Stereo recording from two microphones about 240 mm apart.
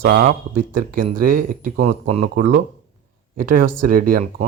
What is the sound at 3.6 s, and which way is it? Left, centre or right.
Speech, right.